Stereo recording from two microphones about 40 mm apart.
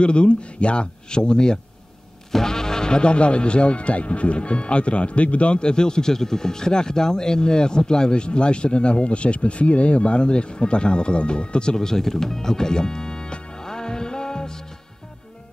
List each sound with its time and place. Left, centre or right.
0.0 s speech: left